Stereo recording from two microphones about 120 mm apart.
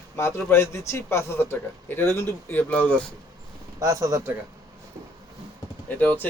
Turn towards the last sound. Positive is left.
turn(degrees=15)  # may be behind; listen again after turning